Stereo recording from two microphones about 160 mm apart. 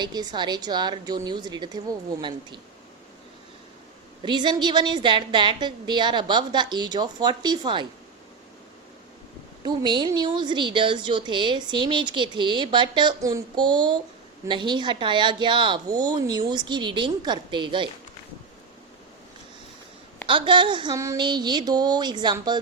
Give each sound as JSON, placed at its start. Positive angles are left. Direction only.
{"t": 0.0, "sound": "a woman's voice", "side_deg": -25}
{"t": 4.2, "sound": "a woman's voice", "side_deg": -30}
{"t": 9.6, "sound": "a woman's voice", "side_deg": -30}
{"t": 20.2, "sound": "a woman's voice", "side_deg": -30}